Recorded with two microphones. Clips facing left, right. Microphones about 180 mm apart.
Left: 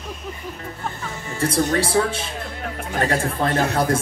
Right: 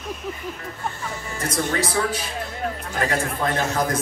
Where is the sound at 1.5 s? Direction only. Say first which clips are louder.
Left 4 dB; 30° left (ahead or behind).